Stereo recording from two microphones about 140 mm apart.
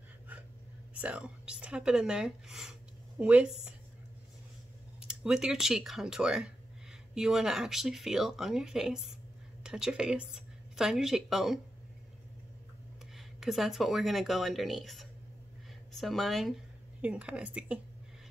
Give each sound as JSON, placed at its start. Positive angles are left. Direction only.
{"t": 0.9, "sound": "a woman's voice", "side_deg": -10}
{"t": 5.0, "sound": "a woman's voice", "side_deg": -5}
{"t": 13.1, "sound": "speech", "side_deg": 0}